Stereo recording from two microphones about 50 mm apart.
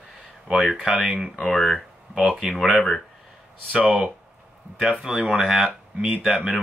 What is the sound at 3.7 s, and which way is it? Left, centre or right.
Speech, right.